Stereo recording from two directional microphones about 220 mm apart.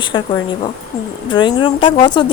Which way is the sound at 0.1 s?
20° left (ahead or behind).